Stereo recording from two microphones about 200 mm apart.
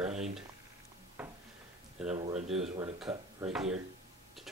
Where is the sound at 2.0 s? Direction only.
Centre (ahead or behind).